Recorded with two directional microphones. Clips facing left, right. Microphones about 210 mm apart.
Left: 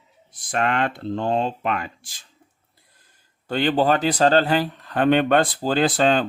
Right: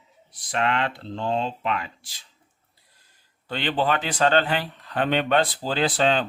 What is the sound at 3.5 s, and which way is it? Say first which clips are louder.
Speech: left 5 dB; 45° left (ahead or behind).